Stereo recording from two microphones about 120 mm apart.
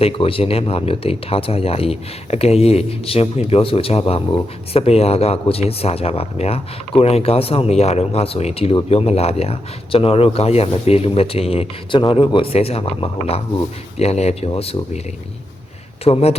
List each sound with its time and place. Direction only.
0.0 s speech: 50° left (ahead or behind)
16.0 s speech: 60° left (ahead or behind)